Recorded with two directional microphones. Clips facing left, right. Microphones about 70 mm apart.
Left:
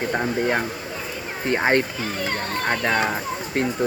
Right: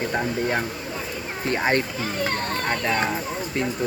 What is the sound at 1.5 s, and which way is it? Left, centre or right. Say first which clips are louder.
Speech: left 3 dB; left.